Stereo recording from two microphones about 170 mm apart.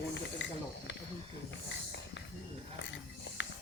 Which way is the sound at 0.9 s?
90° left.